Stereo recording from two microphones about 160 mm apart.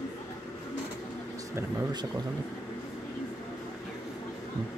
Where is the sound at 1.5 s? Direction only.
25° right (ahead or behind).